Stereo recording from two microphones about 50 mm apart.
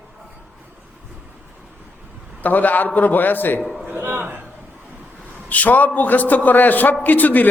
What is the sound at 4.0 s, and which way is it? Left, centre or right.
Speech, right.